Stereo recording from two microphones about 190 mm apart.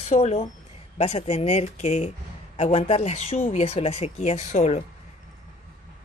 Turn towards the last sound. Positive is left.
turn(degrees=35)  # may be behind; listen again after turning